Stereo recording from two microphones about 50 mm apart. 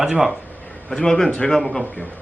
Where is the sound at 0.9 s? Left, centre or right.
Centre.